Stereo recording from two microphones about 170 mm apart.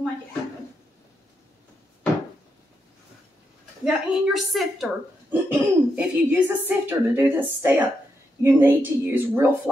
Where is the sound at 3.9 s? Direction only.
Centre (ahead or behind).